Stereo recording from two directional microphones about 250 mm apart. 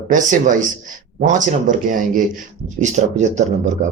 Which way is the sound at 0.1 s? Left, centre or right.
Right.